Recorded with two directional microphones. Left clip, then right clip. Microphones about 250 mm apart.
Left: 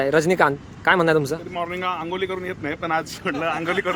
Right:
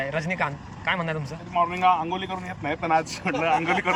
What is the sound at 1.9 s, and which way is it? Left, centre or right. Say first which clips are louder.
Speech: right 1 dB; left.